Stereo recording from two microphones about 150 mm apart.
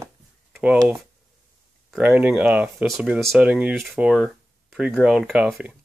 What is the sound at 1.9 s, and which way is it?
Speech, 10° right (ahead or behind).